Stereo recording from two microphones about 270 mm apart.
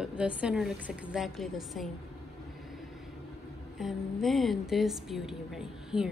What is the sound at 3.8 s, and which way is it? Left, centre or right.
A woman's voice, centre.